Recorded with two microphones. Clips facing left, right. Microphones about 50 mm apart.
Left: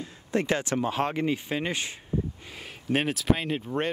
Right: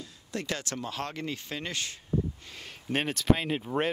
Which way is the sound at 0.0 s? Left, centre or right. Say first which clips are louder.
Left 8 dB; left.